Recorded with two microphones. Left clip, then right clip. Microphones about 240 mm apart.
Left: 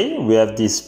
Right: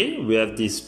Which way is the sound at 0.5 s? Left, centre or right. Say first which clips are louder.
Left 6 dB; centre.